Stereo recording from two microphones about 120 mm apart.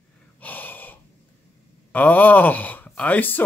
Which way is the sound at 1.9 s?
15° left (ahead or behind).